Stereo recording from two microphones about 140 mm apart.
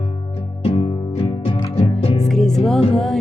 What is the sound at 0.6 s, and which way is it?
Music, 40° left (ahead or behind).